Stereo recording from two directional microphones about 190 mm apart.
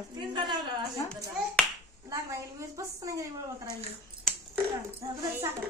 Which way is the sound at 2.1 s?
15° right (ahead or behind).